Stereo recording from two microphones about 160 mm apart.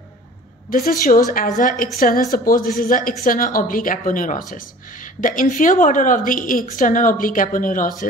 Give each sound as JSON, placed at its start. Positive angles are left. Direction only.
{"t": 0.7, "sound": "a woman's voice", "side_deg": 65}